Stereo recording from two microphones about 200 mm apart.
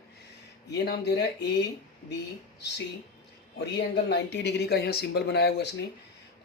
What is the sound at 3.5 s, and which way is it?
Speech, 55° left (ahead or behind).